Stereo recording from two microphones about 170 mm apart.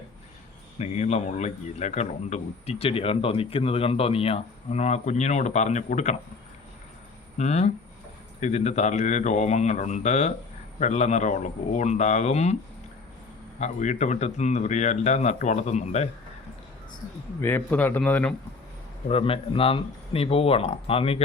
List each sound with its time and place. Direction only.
0.8 s a man's voice: 40° left (ahead or behind)
7.3 s a man's voice: 40° left (ahead or behind)
13.6 s a man's voice: 45° left (ahead or behind)
17.4 s speech: 10° left (ahead or behind)
19.0 s a man's voice: 35° left (ahead or behind)